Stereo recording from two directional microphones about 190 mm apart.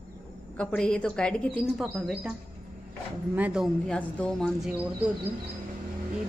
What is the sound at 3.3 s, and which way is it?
A woman's voice, 5° right (ahead or behind).